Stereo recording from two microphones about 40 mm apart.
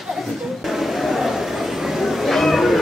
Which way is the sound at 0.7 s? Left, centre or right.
Centre.